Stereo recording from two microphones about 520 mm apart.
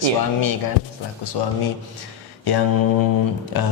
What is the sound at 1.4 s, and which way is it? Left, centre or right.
Speech, left.